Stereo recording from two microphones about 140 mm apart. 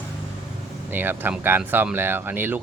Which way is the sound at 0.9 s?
15° right (ahead or behind).